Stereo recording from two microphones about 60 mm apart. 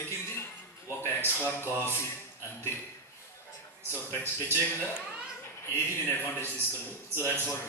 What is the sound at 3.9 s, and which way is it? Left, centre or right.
Speech, left.